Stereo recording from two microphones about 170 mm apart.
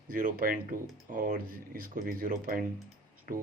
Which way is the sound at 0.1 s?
55° right (ahead or behind).